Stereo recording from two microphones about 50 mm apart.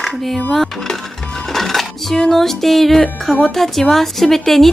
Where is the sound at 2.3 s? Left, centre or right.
Centre.